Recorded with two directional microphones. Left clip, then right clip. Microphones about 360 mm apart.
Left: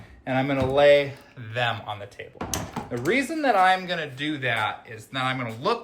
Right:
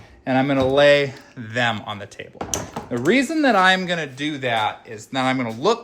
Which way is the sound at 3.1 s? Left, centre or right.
Right.